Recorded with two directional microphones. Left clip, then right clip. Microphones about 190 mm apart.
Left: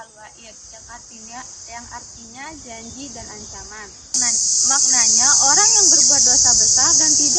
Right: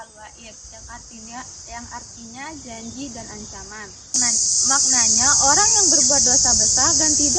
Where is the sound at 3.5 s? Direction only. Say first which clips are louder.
Left 1 dB; centre (ahead or behind).